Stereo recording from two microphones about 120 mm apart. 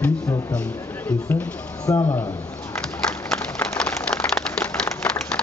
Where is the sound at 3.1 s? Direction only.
5° left (ahead or behind).